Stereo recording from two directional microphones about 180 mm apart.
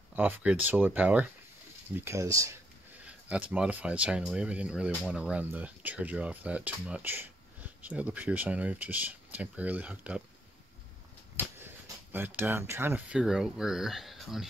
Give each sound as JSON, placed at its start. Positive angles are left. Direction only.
{"t": 0.1, "sound": "speech", "side_deg": -10}
{"t": 11.3, "sound": "speech", "side_deg": -10}